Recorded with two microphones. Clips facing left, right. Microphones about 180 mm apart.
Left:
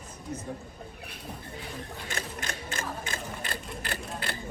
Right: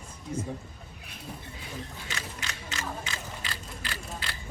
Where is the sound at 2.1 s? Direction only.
50° left (ahead or behind).